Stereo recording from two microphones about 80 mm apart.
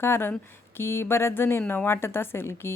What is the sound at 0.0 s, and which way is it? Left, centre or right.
Speech, left.